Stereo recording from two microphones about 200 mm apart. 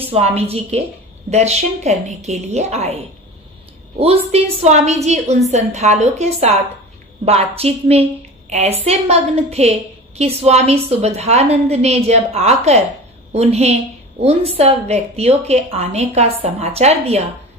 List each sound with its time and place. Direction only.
0.0 s a woman's voice: 30° right (ahead or behind)
4.0 s a woman's voice: 30° right (ahead or behind)